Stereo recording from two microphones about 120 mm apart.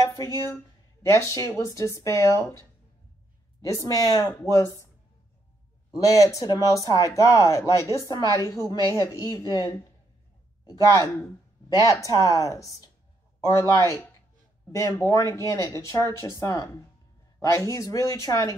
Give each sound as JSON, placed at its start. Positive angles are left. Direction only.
{"t": 0.0, "sound": "speech", "side_deg": 25}
{"t": 3.6, "sound": "speech", "side_deg": 25}
{"t": 5.9, "sound": "speech", "side_deg": 30}